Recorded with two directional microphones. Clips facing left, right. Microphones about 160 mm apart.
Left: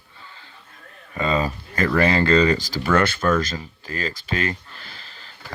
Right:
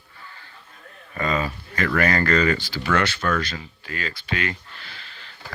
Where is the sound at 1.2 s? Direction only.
25° left (ahead or behind).